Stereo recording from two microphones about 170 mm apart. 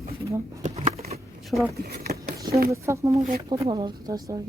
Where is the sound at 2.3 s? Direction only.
20° right (ahead or behind).